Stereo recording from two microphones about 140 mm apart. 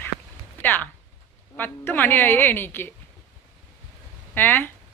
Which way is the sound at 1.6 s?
15° left (ahead or behind).